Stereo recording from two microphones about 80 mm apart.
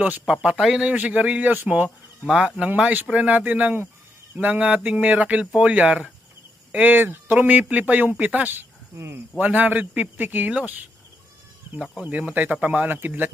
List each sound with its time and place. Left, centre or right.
0.0 s speech: centre
0.9 s speech: centre
12.0 s speech: centre